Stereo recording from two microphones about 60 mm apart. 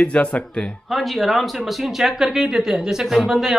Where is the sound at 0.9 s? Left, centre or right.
Centre.